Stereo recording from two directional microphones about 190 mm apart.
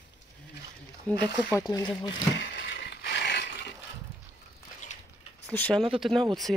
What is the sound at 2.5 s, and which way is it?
Mechanisms, 65° left (ahead or behind).